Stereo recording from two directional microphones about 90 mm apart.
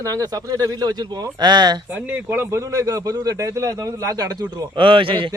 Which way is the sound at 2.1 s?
20° right (ahead or behind).